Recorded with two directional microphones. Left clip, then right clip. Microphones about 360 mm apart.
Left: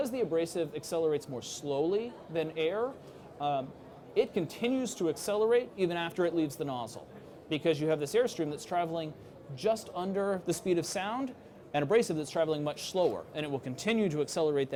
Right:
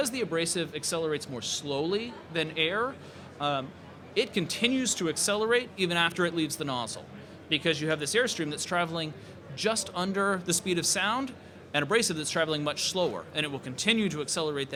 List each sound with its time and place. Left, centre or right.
0.0 s speech: centre; by 14.8 s left